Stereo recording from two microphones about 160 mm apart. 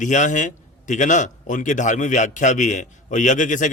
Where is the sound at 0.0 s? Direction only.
50° left (ahead or behind).